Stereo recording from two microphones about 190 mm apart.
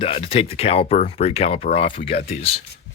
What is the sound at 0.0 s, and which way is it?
Speech, 30° left (ahead or behind).